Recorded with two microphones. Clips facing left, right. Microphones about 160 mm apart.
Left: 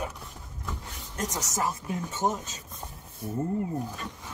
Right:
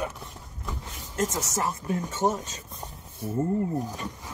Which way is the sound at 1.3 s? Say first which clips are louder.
Right 1 dB; centre (ahead or behind).